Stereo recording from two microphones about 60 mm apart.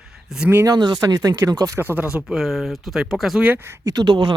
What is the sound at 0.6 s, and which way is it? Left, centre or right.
Speech, right.